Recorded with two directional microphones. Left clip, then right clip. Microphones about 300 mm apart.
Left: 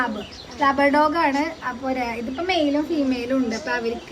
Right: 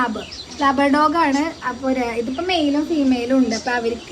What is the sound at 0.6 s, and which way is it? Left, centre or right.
A woman's voice, centre.